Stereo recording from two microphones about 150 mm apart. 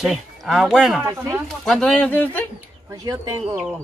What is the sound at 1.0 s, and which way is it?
Speech, 15° right (ahead or behind).